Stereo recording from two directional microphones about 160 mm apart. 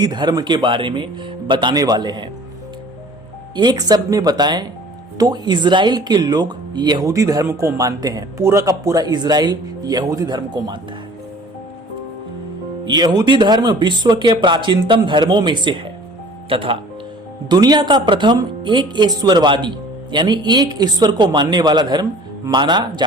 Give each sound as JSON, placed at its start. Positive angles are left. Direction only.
{"t": 0.0, "sound": "speech", "side_deg": -25}
{"t": 3.5, "sound": "speech", "side_deg": -25}
{"t": 12.9, "sound": "speech", "side_deg": -25}